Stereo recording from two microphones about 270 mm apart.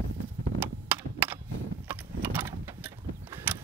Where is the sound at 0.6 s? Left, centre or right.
Centre.